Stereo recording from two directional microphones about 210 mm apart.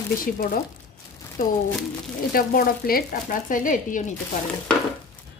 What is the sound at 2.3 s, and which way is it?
A woman's voice, 45° left (ahead or behind).